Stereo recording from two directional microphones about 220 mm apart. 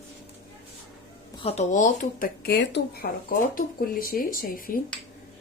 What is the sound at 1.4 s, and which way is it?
Speech, 35° left (ahead or behind).